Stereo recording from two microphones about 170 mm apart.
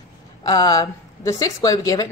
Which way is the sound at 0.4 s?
25° left (ahead or behind).